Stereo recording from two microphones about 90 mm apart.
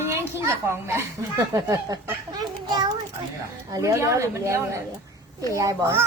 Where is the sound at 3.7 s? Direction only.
35° right (ahead or behind).